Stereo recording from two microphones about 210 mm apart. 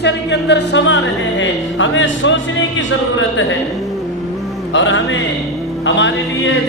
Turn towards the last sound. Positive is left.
turn(degrees=60)  # may be behind; listen again after turning